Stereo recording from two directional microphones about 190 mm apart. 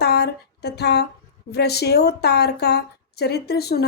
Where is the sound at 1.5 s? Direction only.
60° left (ahead or behind).